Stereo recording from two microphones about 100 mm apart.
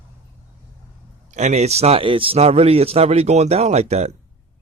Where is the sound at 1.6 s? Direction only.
90° right.